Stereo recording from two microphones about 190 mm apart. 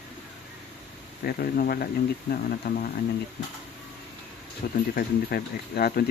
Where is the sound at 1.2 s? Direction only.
50° left (ahead or behind).